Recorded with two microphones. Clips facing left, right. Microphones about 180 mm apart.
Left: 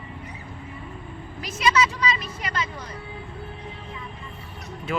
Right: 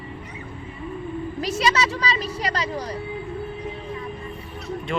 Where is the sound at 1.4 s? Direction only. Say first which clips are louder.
Even; 35° right (ahead or behind).